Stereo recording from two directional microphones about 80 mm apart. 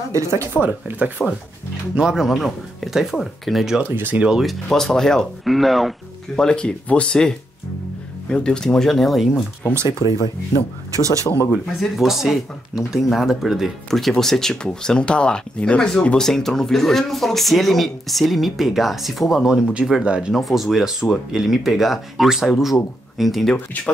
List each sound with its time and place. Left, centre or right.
0.1 s speech: right
0.6 s speech: right
2.0 s speech: centre
3.8 s speech: right
4.2 s speech: centre
4.6 s speech: centre
9.3 s speech: centre
9.8 s speech: left
11.2 s speech: left
11.6 s speech: centre
20.3 s speech: centre